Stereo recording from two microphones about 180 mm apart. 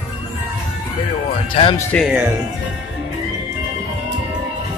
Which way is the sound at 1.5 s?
30° left (ahead or behind).